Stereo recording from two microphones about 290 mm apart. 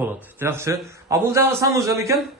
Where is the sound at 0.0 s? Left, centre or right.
Centre.